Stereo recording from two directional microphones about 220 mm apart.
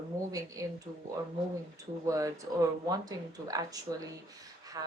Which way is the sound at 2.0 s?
15° right (ahead or behind).